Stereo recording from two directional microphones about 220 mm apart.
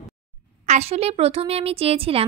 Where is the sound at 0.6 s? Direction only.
30° right (ahead or behind).